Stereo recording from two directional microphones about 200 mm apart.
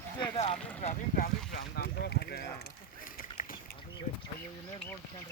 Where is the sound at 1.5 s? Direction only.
50° left (ahead or behind).